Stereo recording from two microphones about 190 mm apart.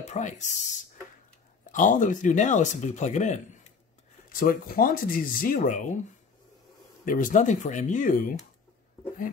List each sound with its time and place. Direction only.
0.0 s speech: 40° left (ahead or behind)
1.7 s speech: 40° left (ahead or behind)
4.3 s speech: 50° left (ahead or behind)
7.1 s speech: 45° left (ahead or behind)